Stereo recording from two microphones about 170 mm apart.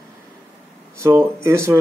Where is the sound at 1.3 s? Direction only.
15° right (ahead or behind).